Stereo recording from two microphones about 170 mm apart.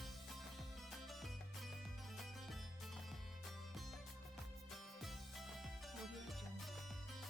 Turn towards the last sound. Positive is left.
turn(degrees=0)  # may be behind; listen again after turning